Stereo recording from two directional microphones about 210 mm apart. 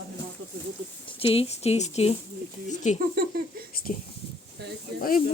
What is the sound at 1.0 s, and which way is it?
Speech, 25° left (ahead or behind).